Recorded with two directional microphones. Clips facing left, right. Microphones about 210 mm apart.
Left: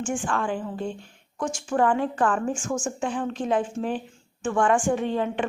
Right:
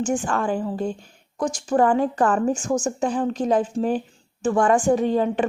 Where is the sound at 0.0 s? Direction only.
40° right (ahead or behind).